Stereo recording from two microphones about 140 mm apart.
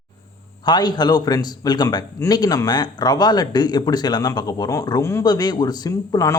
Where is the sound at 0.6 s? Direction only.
30° left (ahead or behind).